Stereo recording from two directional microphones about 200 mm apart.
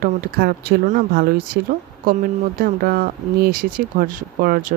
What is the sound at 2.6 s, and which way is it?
Speech, 50° right (ahead or behind).